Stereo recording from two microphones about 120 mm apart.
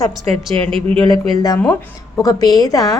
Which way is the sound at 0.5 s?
50° right (ahead or behind).